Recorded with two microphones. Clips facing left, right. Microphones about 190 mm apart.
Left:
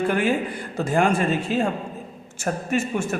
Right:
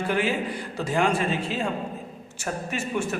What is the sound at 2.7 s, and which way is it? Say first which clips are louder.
Speech: left 4 dB; 45° left (ahead or behind).